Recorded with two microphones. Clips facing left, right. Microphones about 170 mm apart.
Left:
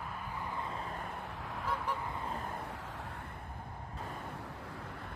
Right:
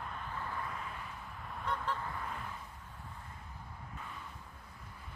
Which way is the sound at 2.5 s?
65° left (ahead or behind).